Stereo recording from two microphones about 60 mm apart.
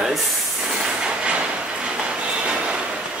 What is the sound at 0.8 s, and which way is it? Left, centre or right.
Train, centre.